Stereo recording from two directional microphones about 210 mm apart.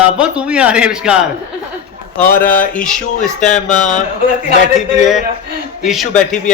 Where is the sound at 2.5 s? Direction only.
5° left (ahead or behind).